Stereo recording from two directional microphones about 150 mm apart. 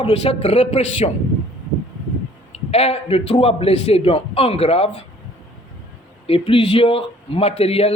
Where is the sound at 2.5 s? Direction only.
40° left (ahead or behind).